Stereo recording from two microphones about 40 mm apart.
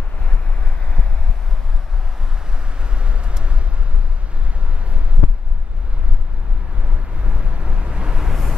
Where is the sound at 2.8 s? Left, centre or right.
Right.